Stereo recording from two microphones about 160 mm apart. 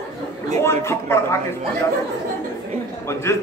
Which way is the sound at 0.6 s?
15° left (ahead or behind).